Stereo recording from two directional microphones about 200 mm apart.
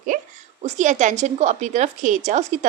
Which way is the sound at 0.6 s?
35° right (ahead or behind).